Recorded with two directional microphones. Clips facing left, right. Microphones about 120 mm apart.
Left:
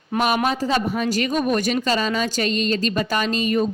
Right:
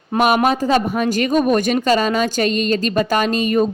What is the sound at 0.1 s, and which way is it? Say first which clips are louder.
Speech: right 5 dB; 35° right (ahead or behind).